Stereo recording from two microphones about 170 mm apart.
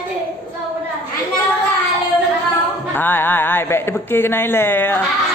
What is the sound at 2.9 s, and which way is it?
A man's voice, 10° left (ahead or behind).